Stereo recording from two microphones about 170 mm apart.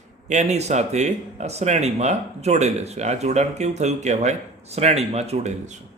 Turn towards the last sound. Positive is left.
turn(degrees=-40)  # may be behind; listen again after turning